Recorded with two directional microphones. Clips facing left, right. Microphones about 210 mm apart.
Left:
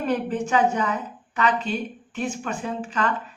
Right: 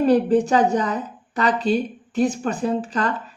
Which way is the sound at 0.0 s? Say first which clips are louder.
Right 8 dB; 35° right (ahead or behind).